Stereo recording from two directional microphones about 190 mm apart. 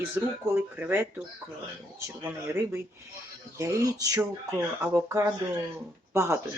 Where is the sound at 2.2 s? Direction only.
10° right (ahead or behind).